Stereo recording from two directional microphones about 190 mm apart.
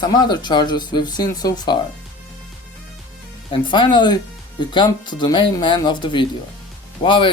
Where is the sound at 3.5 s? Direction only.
25° left (ahead or behind).